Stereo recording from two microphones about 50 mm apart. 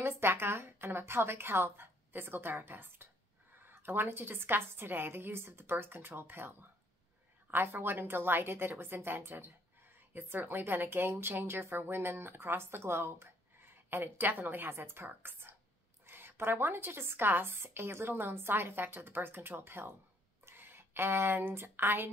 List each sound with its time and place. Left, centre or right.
0.0 s a woman's voice: right